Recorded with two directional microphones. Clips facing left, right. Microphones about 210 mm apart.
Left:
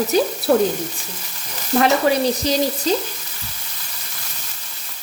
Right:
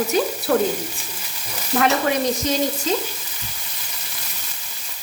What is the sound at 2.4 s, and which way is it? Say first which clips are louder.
Speech: left 2 dB; 35° left (ahead or behind).